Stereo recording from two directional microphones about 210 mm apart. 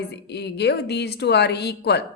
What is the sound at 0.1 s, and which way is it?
A woman's voice, 50° left (ahead or behind).